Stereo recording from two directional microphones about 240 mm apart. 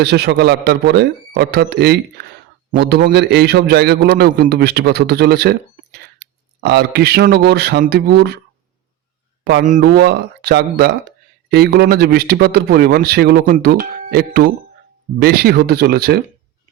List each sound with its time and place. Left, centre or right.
0.0 s a man's voice: right
9.4 s a man's voice: right